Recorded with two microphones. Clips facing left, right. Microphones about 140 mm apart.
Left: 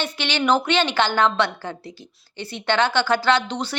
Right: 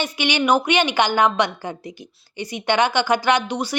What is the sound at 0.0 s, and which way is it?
Speech, 15° right (ahead or behind).